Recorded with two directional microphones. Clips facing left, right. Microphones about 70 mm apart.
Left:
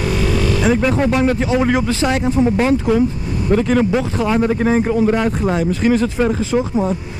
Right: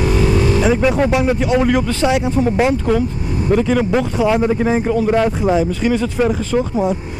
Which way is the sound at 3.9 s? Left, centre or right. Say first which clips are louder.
Right 2 dB; centre.